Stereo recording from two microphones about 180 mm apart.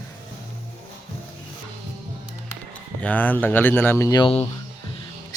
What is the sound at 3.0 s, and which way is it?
Speech, 10° left (ahead or behind).